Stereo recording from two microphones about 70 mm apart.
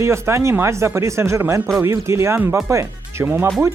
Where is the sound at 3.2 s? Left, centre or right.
Right.